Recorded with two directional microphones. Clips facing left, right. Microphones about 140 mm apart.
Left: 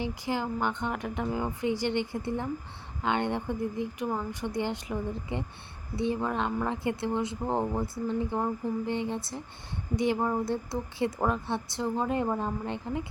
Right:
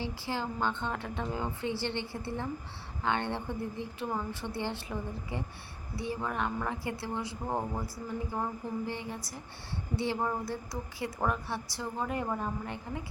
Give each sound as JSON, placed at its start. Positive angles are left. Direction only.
{"t": 0.0, "sound": "a woman's voice", "side_deg": 15}